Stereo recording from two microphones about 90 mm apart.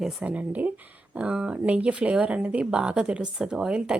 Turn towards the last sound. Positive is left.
turn(degrees=-10)  # may be behind; listen again after turning